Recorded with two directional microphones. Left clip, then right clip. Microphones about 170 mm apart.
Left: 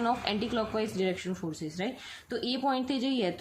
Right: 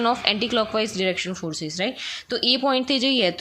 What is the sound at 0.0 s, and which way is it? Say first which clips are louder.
A woman's voice: right 9 dB; 20° right (ahead or behind).